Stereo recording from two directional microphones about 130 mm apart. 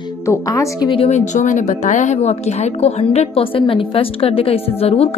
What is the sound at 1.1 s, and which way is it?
A woman's voice, 70° left (ahead or behind).